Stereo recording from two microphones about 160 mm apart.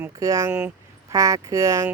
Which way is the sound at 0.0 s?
20° right (ahead or behind).